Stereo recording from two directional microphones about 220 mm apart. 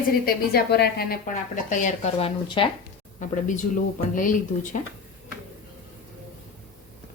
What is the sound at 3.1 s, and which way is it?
Speech, 35° left (ahead or behind).